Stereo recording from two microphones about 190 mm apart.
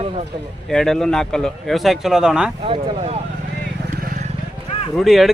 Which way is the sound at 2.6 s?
30° right (ahead or behind).